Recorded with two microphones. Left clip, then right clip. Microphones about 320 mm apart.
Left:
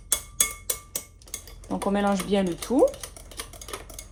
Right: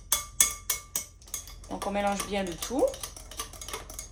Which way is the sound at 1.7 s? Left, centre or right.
Left.